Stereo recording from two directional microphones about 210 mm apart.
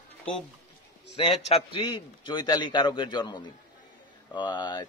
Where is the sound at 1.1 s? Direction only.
25° left (ahead or behind).